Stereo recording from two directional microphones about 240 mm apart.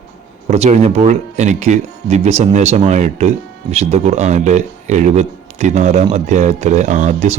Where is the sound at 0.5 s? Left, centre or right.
Right.